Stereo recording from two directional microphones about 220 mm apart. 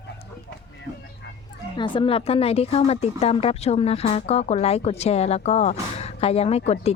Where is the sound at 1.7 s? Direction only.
20° left (ahead or behind).